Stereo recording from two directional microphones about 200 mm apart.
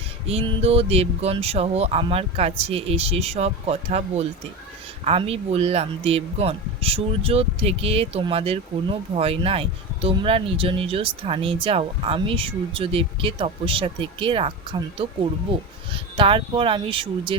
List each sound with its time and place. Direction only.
0.3 s speech: 25° right (ahead or behind)